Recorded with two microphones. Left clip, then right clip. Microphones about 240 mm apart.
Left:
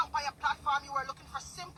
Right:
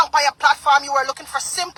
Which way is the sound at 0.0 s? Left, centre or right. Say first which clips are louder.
Right 16 dB; right.